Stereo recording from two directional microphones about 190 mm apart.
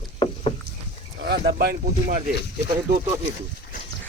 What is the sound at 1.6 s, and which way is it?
Speech, 50° right (ahead or behind).